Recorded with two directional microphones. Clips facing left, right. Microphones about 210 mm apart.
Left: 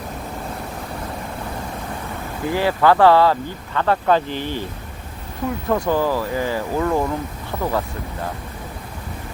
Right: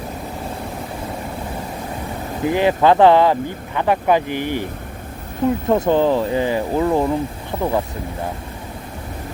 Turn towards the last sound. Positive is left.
turn(degrees=-15)  # may be behind; listen again after turning